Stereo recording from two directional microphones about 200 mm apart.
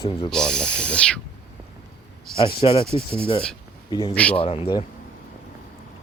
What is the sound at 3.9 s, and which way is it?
Speech, 20° left (ahead or behind).